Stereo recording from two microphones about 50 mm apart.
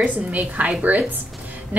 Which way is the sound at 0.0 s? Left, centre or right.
Right.